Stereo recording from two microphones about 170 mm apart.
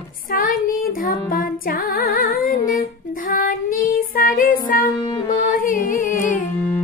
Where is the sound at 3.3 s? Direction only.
55° left (ahead or behind).